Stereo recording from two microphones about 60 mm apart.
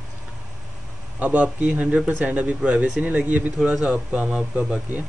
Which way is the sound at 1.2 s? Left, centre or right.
Right.